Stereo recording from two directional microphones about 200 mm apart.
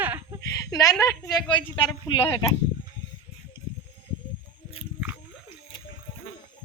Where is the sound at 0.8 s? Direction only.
15° left (ahead or behind).